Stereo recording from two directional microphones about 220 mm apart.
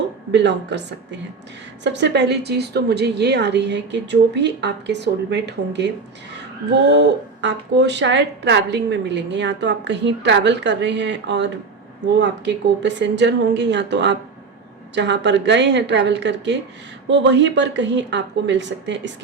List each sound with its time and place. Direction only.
0.3 s speech: 50° right (ahead or behind)